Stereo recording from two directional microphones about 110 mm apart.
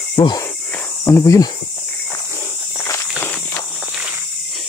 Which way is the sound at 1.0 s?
25° left (ahead or behind).